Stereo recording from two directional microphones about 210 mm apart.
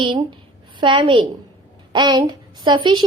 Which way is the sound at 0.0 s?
25° right (ahead or behind).